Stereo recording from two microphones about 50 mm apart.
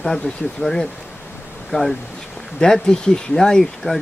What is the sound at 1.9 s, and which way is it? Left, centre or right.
Speech, centre.